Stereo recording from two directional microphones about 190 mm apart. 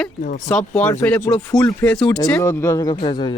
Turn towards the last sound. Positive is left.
turn(degrees=25)  # may be behind; listen again after turning